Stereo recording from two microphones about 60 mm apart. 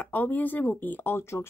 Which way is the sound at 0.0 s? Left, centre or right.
Left.